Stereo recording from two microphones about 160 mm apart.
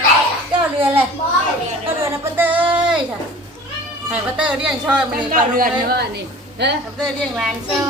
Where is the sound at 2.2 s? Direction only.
10° right (ahead or behind).